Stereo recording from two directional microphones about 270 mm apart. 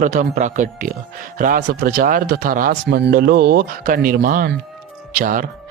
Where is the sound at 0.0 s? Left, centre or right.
Right.